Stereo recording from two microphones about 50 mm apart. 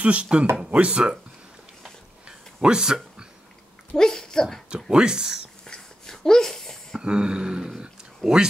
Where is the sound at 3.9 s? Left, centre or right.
Centre.